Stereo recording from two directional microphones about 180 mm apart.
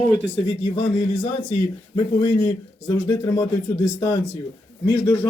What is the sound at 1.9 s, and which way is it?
A man's voice, 20° left (ahead or behind).